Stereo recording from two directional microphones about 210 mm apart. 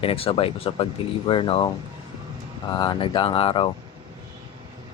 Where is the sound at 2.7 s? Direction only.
20° left (ahead or behind).